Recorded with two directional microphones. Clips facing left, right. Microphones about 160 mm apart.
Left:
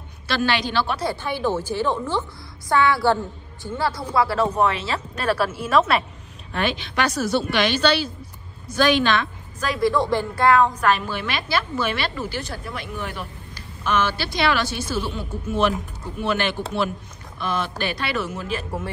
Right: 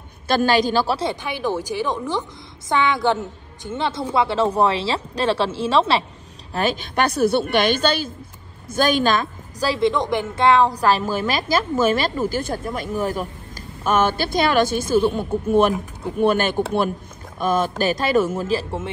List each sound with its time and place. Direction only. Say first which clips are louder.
0.3 s a woman's voice: right 5 dB; 45° right (ahead or behind)
1.2 s a woman's voice: even; 15° right (ahead or behind)
6.5 s a woman's voice: right 3 dB; 40° right (ahead or behind)
9.8 s a woman's voice: left 1 dB; 20° right (ahead or behind)